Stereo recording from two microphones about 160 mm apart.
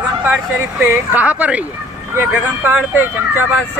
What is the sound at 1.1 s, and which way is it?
Speech, 10° right (ahead or behind).